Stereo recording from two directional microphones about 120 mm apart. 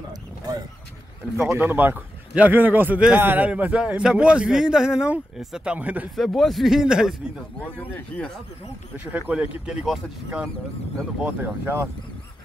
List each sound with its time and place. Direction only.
1.5 s a man's voice: 15° right (ahead or behind)
6.1 s speech: centre (ahead or behind)
7.6 s speech: 10° left (ahead or behind)
8.9 s a man's voice: 15° right (ahead or behind)
11.2 s speech: 15° right (ahead or behind)